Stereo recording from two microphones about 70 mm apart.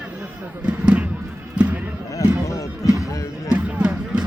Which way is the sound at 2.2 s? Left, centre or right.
Left.